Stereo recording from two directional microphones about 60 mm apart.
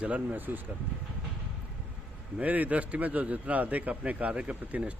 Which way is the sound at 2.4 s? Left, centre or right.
Right.